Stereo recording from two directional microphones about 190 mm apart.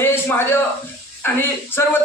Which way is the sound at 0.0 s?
10° left (ahead or behind).